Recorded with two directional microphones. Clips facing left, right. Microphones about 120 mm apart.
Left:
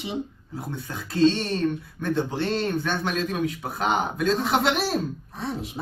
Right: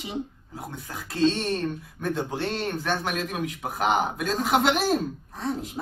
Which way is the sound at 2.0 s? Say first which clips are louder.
Left 2 dB; 10° right (ahead or behind).